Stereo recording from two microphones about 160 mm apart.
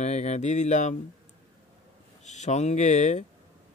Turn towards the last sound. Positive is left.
turn(degrees=45)  # may be behind; listen again after turning